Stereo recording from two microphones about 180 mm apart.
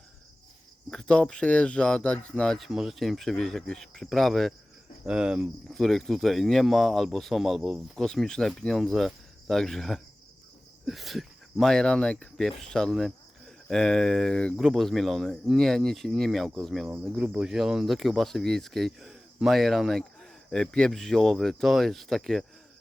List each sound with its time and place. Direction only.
0.9 s speech: 5° left (ahead or behind)